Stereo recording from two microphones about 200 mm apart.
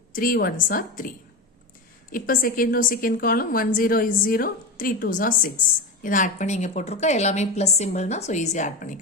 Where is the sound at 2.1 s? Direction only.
45° left (ahead or behind).